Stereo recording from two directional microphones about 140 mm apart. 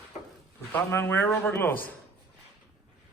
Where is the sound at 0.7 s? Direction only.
15° left (ahead or behind).